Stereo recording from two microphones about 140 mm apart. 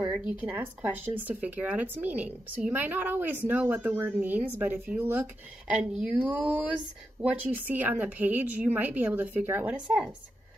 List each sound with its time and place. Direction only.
0.4 s speech: 10° right (ahead or behind)